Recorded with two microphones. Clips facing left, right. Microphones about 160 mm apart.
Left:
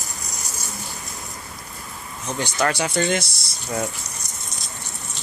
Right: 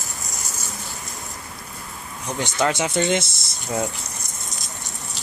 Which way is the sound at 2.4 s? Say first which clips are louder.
Right 1 dB; 20° right (ahead or behind).